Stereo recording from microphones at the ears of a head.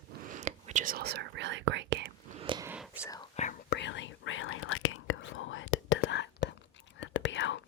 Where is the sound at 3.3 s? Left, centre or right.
Left.